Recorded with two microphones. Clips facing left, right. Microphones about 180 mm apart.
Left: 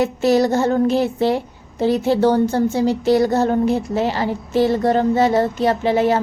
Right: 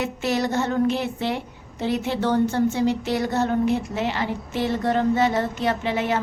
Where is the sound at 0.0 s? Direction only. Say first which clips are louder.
Left 8 dB; 35° left (ahead or behind).